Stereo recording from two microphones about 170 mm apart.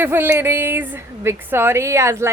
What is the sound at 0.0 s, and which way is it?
A woman's voice, 15° right (ahead or behind).